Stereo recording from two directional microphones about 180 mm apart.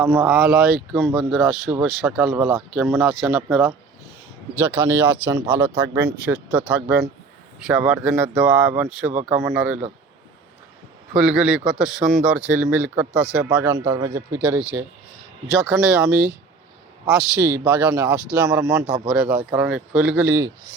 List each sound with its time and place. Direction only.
0.0 s speech: 10° right (ahead or behind)
11.1 s speech: 5° right (ahead or behind)